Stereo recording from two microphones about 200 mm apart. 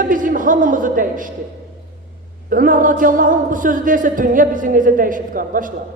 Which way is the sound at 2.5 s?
40° right (ahead or behind).